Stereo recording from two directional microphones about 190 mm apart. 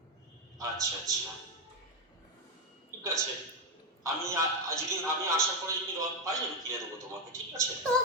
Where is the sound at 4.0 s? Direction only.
15° right (ahead or behind).